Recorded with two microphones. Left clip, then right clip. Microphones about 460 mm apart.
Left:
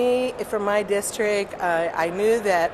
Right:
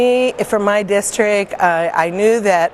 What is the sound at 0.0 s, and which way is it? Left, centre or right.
A woman's voice, right.